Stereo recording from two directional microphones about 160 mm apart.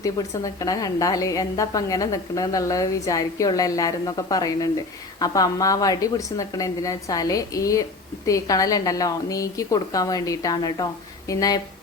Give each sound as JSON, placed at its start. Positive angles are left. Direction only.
{"t": 0.0, "sound": "a woman's voice", "side_deg": 20}